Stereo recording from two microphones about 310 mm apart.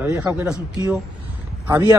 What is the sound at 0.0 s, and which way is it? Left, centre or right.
Speech, centre.